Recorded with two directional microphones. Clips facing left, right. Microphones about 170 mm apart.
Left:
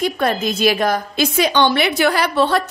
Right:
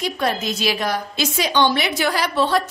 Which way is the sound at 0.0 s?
55° left (ahead or behind).